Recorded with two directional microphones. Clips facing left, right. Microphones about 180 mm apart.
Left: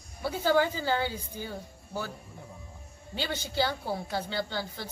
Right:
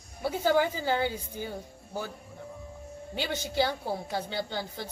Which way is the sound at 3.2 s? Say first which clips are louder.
Right 1 dB; 15° right (ahead or behind).